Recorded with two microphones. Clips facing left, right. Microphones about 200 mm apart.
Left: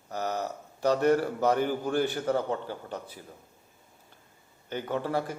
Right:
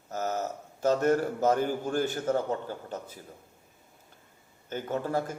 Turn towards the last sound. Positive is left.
turn(degrees=-45)  # may be behind; listen again after turning